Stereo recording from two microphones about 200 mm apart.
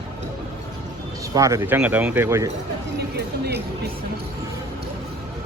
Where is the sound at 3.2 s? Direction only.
55° right (ahead or behind).